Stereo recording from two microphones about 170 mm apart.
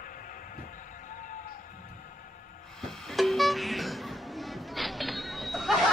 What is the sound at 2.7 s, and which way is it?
Music, 5° left (ahead or behind).